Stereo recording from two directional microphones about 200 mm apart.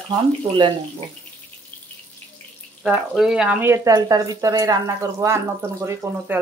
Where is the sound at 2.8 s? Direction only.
5° right (ahead or behind).